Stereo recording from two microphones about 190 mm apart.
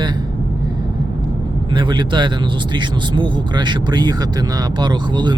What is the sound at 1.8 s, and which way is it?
Speech, 25° right (ahead or behind).